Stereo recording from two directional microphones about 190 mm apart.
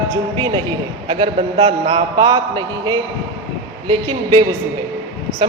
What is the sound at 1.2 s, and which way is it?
Speech, 30° right (ahead or behind).